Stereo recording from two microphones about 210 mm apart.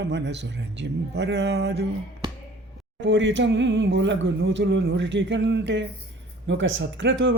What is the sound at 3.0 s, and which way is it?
Speech, 60° right (ahead or behind).